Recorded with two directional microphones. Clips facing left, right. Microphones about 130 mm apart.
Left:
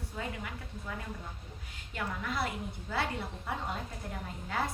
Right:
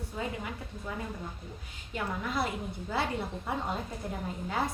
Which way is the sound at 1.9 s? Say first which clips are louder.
Right 3 dB; 20° right (ahead or behind).